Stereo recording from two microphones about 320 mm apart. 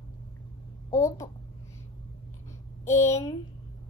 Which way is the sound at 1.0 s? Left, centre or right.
Centre.